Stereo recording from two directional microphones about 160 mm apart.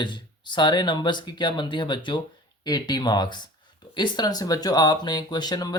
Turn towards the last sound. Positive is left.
turn(degrees=25)  # may be behind; listen again after turning